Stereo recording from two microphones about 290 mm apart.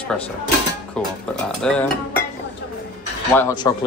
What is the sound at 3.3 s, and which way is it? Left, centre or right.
Speech, centre.